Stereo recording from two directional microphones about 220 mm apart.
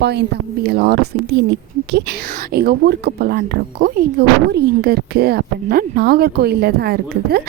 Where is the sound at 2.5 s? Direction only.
45° right (ahead or behind).